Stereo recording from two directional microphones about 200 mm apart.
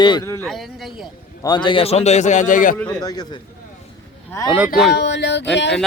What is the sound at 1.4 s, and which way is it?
A man's voice, 20° left (ahead or behind).